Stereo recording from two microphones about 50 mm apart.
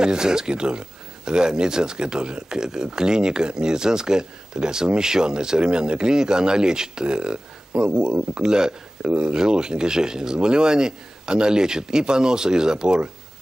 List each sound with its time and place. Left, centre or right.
0.0 s speech: centre
9.0 s speech: right
9.3 s speech: centre